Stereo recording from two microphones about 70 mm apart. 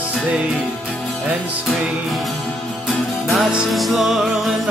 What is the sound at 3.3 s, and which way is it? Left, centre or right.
Music, centre.